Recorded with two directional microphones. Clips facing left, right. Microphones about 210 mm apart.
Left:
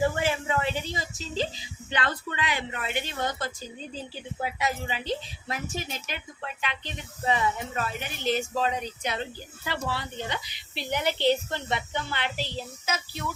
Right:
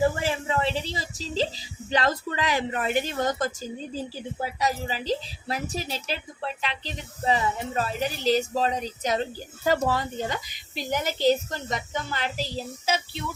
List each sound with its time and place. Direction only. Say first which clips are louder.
0.2 s a woman's voice: right 1 dB; 35° right (ahead or behind)